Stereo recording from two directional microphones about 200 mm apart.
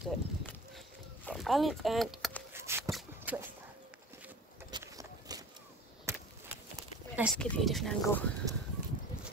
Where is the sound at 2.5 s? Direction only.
10° right (ahead or behind).